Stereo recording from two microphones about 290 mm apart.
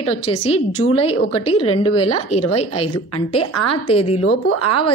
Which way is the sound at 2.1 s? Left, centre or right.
Left.